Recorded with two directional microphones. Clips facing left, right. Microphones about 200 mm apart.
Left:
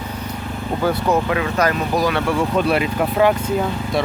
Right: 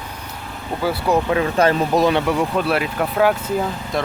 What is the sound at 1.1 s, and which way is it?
Speech, 30° right (ahead or behind).